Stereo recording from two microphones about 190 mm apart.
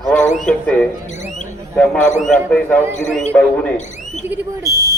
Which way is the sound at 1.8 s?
5° left (ahead or behind).